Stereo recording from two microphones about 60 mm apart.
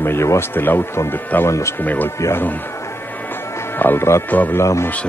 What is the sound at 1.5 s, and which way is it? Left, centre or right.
Speech, left.